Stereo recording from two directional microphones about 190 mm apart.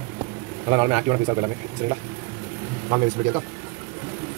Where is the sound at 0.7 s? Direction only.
15° right (ahead or behind).